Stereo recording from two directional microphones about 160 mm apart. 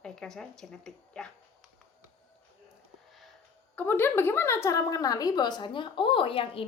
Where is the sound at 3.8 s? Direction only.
10° left (ahead or behind).